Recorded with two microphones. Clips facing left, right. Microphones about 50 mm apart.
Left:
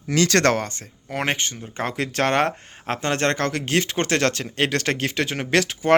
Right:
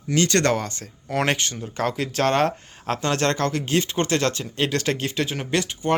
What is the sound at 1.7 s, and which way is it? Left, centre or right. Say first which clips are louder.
Speech: right 1 dB; left.